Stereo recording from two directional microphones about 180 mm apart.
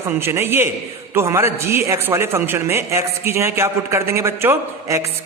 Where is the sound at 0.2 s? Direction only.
15° right (ahead or behind).